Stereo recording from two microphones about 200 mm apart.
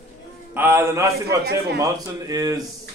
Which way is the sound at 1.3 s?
55° right (ahead or behind).